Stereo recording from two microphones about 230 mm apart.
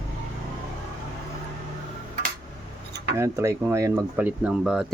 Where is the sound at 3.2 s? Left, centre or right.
Centre.